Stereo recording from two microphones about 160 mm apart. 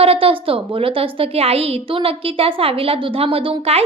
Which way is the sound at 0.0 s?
35° right (ahead or behind).